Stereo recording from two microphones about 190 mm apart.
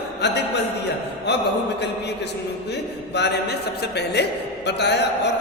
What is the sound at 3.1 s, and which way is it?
Speech, 60° left (ahead or behind).